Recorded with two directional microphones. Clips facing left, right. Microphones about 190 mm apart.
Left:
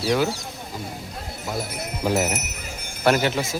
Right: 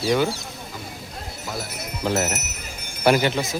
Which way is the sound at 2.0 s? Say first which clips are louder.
Left 1 dB; 10° left (ahead or behind).